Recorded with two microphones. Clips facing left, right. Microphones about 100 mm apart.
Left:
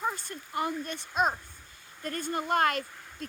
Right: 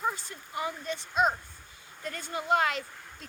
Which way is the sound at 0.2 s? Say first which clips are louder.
Left 2 dB; 55° left (ahead or behind).